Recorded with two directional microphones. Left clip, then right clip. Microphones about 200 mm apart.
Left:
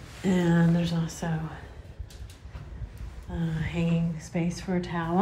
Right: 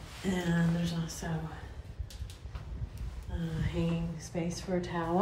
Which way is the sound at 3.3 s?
15° right (ahead or behind).